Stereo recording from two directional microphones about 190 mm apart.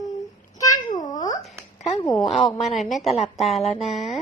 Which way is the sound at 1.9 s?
20° left (ahead or behind).